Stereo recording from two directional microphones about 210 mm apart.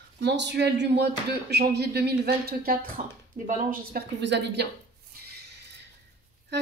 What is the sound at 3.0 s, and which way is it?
Speech, 35° right (ahead or behind).